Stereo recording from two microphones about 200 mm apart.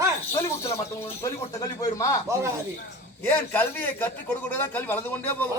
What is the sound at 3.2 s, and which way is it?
Speech, 10° left (ahead or behind).